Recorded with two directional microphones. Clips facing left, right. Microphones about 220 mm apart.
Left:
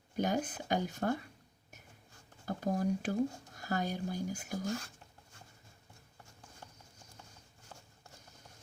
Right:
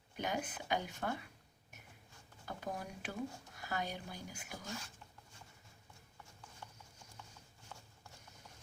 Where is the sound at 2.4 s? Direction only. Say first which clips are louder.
Left 11 dB; 40° left (ahead or behind).